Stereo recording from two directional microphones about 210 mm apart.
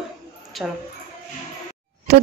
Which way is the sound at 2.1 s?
55° right (ahead or behind).